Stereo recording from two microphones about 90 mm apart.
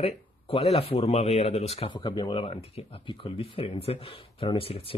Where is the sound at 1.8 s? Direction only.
60° left (ahead or behind); by 5.0 s 90° left.